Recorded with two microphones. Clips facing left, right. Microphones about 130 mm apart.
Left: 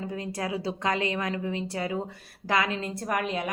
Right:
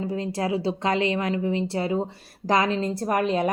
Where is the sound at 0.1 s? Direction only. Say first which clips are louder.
Right 5 dB; 25° right (ahead or behind).